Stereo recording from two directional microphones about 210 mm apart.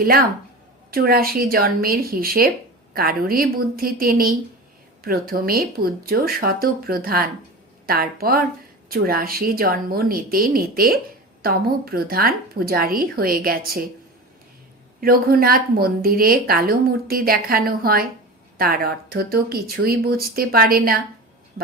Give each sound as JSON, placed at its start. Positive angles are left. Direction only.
{"t": 0.9, "sound": "a woman's voice", "side_deg": -45}
{"t": 15.0, "sound": "a woman's voice", "side_deg": -45}